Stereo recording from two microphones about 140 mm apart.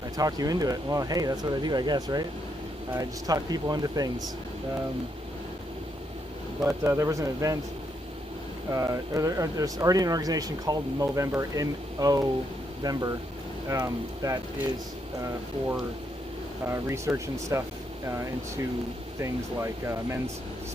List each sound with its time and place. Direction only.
0.2 s speech: 25° right (ahead or behind)
6.6 s speech: 20° right (ahead or behind)
8.7 s speech: 25° right (ahead or behind)
16.6 s speech: 20° right (ahead or behind)
19.2 s speech: 20° right (ahead or behind)